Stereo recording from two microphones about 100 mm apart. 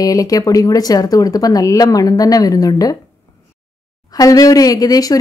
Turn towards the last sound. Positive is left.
turn(degrees=40)  # may be behind; listen again after turning